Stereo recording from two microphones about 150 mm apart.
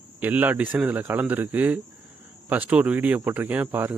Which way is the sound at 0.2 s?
10° right (ahead or behind).